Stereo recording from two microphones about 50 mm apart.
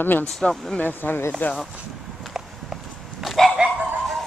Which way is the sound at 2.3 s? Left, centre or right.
Centre.